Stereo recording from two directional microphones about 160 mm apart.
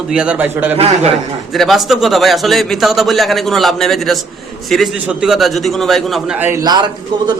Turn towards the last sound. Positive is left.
turn(degrees=-25)  # may be behind; listen again after turning